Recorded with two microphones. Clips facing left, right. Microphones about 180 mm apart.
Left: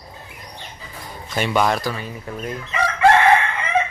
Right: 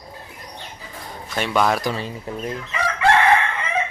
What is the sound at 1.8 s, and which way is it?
Speech, 25° right (ahead or behind).